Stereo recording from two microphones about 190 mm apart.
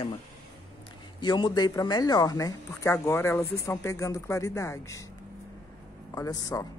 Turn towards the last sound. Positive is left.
turn(degrees=15)  # may be behind; listen again after turning